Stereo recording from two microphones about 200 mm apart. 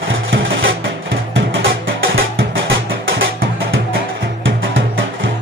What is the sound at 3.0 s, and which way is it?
Music, 80° right.